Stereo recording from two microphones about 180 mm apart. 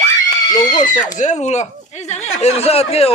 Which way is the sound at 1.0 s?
40° left (ahead or behind).